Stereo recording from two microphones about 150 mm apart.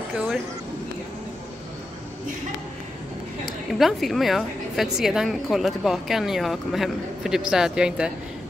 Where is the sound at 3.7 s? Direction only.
Centre (ahead or behind).